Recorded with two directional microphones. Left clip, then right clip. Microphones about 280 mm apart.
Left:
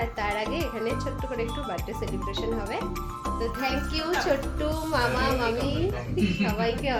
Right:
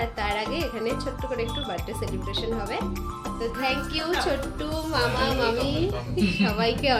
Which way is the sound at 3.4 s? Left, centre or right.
Centre.